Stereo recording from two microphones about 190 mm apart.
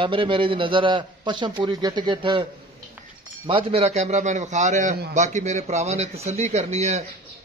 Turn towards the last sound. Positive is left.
turn(degrees=-35)  # may be behind; listen again after turning